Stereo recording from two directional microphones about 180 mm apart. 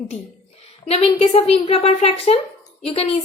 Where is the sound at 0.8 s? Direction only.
35° left (ahead or behind).